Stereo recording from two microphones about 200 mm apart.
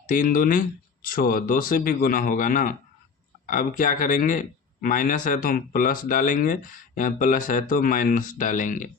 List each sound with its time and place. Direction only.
0.1 s speech: 45° left (ahead or behind)